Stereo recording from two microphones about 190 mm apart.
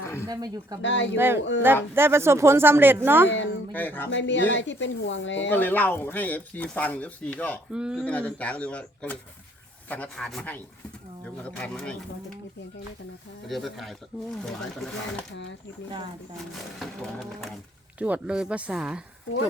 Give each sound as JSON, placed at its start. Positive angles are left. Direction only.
{"t": 0.0, "sound": "a sound", "side_deg": 15}
{"t": 0.3, "sound": "speech", "side_deg": -20}
{"t": 0.8, "sound": "speech", "side_deg": 75}
{"t": 1.1, "sound": "speech", "side_deg": -10}
{"t": 1.4, "sound": "speech", "side_deg": 75}
{"t": 1.6, "sound": "speech", "side_deg": -10}
{"t": 3.2, "sound": "speech", "side_deg": 75}
{"t": 3.7, "sound": "speech", "side_deg": 10}
{"t": 4.1, "sound": "speech", "side_deg": 70}
{"t": 5.5, "sound": "speech", "side_deg": 10}
{"t": 7.7, "sound": "speech", "side_deg": -5}
{"t": 8.0, "sound": "speech", "side_deg": 5}
{"t": 13.5, "sound": "speech", "side_deg": 0}
{"t": 16.8, "sound": "speech", "side_deg": 0}